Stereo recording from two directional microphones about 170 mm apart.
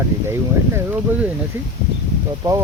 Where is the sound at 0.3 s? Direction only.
10° right (ahead or behind).